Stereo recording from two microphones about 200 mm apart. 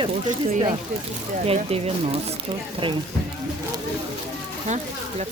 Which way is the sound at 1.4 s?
30° right (ahead or behind).